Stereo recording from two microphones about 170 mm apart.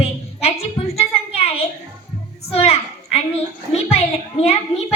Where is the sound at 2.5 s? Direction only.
35° left (ahead or behind).